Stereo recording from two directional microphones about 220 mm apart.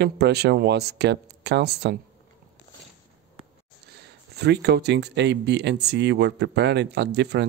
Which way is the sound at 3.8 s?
50° right (ahead or behind).